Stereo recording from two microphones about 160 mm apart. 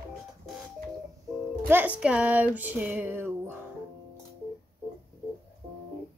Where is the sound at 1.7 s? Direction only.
10° right (ahead or behind).